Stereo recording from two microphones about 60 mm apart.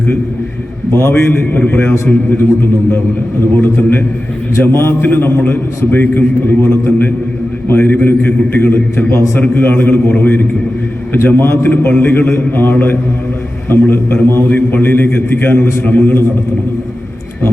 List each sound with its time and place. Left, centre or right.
0.9 s a man's voice: left
15.9 s a man's voice: left